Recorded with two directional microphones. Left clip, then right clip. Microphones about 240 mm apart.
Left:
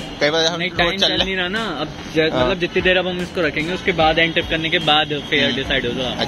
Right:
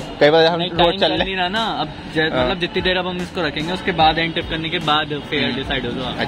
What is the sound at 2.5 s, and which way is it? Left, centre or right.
Speech, centre.